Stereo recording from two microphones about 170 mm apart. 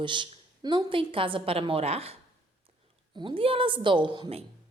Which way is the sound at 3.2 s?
30° right (ahead or behind).